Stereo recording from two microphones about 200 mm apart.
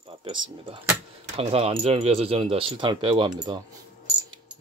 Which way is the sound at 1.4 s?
30° right (ahead or behind).